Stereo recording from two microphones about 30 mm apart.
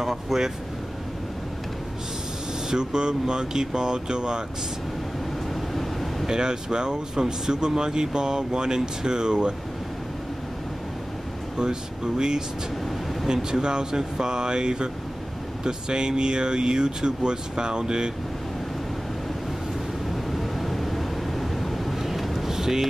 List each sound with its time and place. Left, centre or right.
0.0 s speech: centre
2.7 s speech: right
5.8 s air conditioning: centre
6.2 s speech: right
12.2 s speech: right
20.2 s vehicle: centre